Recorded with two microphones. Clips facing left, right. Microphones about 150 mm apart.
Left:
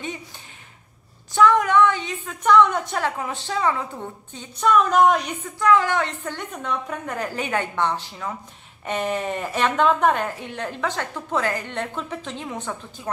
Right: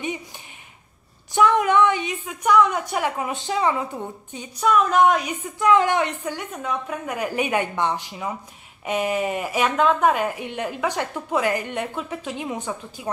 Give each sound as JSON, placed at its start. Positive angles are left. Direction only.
{"t": 1.3, "sound": "speech", "side_deg": -20}
{"t": 2.5, "sound": "speech", "side_deg": -5}
{"t": 4.6, "sound": "speech", "side_deg": 0}
{"t": 5.6, "sound": "speech", "side_deg": -20}